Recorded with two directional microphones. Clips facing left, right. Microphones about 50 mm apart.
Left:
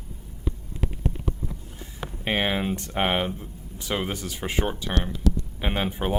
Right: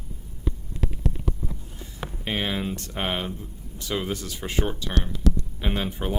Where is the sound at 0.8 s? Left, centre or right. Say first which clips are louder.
Even; left.